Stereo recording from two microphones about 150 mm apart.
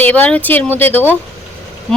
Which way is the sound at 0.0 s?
10° left (ahead or behind).